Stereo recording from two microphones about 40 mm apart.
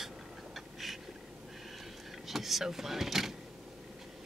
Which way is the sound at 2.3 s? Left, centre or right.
Centre.